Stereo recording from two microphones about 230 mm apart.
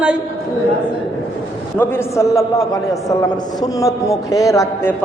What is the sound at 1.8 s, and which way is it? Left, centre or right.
A man's voice, centre.